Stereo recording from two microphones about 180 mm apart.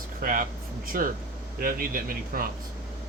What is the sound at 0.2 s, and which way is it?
Speech, 50° right (ahead or behind).